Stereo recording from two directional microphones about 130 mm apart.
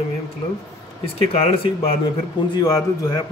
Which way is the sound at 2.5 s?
30° left (ahead or behind).